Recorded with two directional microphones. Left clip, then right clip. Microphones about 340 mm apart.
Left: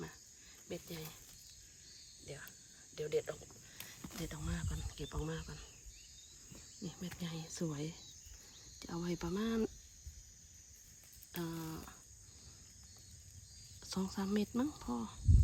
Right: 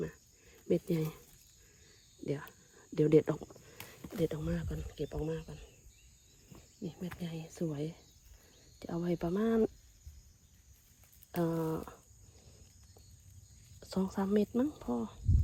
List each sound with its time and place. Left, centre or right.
0.7 s speech: centre
2.2 s speech: centre
2.9 s cricket: centre
3.8 s speech: centre
6.8 s speech: centre
11.7 s speech: centre
13.8 s speech: centre